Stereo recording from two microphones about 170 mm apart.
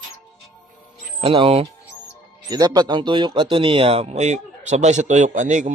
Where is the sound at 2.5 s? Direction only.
20° right (ahead or behind).